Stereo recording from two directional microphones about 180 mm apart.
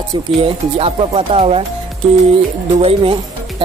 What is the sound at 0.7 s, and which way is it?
Speech, 30° right (ahead or behind).